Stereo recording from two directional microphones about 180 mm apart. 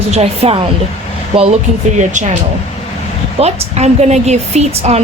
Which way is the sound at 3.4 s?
35° right (ahead or behind).